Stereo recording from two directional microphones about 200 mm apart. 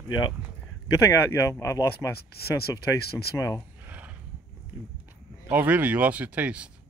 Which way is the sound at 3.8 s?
10° right (ahead or behind).